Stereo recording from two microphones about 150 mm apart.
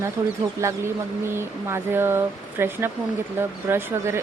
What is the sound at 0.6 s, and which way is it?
A woman's voice, 15° right (ahead or behind).